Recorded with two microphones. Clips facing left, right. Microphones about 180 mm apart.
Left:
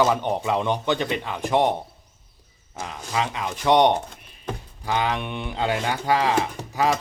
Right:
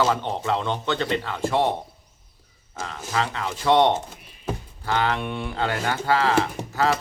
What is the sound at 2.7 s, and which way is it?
Speech, 15° left (ahead or behind).